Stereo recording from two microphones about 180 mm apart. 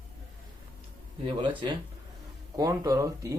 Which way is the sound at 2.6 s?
20° right (ahead or behind).